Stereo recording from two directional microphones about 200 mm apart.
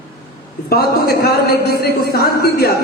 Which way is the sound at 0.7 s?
50° left (ahead or behind).